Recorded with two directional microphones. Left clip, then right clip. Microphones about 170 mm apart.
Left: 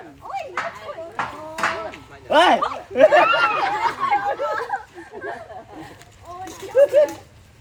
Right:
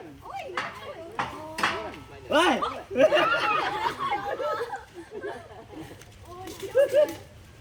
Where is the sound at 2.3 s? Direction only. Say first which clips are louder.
Left 8 dB; 45° left (ahead or behind).